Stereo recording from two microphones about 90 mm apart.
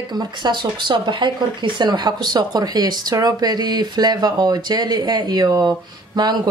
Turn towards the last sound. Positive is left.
turn(degrees=-50)  # may be behind; listen again after turning